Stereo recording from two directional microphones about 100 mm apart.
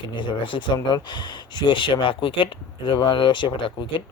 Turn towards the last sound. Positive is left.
turn(degrees=55)  # may be behind; listen again after turning